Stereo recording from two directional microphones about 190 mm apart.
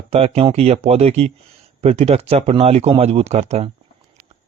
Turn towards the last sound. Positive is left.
turn(degrees=-35)  # may be behind; listen again after turning